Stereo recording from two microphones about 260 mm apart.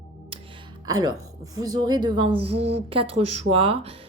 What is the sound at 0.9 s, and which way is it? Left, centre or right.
A woman's voice, centre.